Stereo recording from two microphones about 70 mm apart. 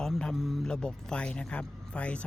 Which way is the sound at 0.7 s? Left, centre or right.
Centre.